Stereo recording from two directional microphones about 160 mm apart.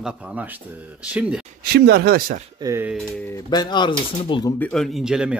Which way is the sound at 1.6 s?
85° right.